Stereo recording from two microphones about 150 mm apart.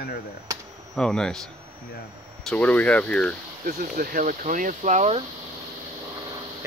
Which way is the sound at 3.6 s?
70° right (ahead or behind).